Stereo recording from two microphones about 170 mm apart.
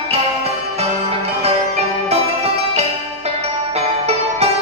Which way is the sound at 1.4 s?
40° right (ahead or behind).